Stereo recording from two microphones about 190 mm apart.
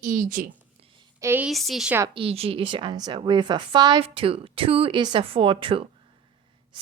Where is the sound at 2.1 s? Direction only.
30° right (ahead or behind).